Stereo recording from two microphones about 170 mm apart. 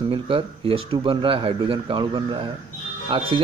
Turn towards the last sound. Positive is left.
turn(degrees=-30)  # may be behind; listen again after turning